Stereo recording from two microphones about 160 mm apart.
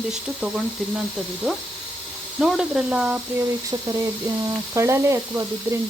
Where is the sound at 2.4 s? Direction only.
5° right (ahead or behind).